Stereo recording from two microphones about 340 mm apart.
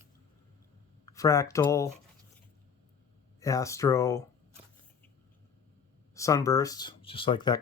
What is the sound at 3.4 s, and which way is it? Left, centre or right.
Speech, centre.